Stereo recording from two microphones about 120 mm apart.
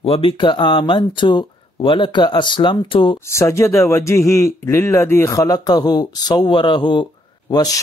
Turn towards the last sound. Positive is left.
turn(degrees=30)  # may be behind; listen again after turning